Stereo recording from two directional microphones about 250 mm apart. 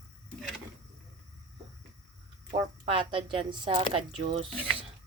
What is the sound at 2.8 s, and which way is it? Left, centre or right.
Speech, right.